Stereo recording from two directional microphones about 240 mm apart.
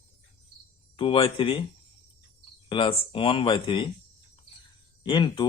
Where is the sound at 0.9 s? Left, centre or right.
Left.